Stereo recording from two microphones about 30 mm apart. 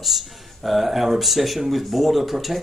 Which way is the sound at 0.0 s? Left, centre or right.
Centre.